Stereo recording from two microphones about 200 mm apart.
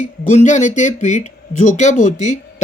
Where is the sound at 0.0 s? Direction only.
35° left (ahead or behind).